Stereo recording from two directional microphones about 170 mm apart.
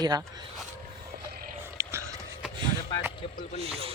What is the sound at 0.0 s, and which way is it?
Speech, 25° right (ahead or behind).